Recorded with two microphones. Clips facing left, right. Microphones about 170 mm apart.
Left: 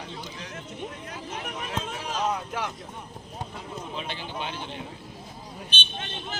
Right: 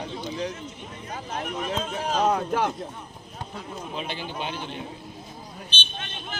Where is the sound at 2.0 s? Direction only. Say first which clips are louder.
Right 7 dB; 55° right (ahead or behind).